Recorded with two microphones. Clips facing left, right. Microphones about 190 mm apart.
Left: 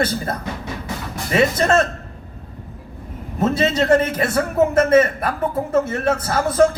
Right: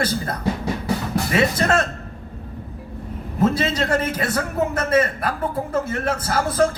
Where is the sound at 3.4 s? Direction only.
25° left (ahead or behind).